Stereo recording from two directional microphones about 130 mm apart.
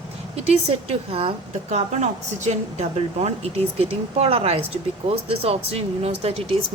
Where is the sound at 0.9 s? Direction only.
45° right (ahead or behind).